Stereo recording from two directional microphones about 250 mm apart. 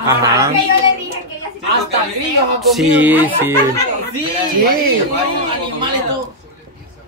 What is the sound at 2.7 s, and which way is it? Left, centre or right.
Speech, centre.